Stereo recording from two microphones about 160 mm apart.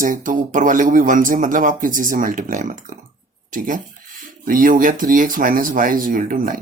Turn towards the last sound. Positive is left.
turn(degrees=-60)  # may be behind; listen again after turning